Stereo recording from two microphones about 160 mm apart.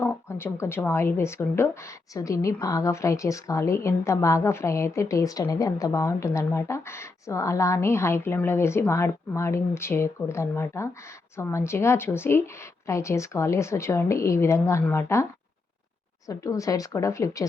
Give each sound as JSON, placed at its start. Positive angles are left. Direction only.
{"t": 0.0, "sound": "a woman's voice", "side_deg": 15}